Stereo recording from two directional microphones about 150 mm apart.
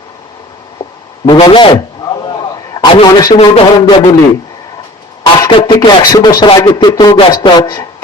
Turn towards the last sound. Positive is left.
turn(degrees=25)  # may be behind; listen again after turning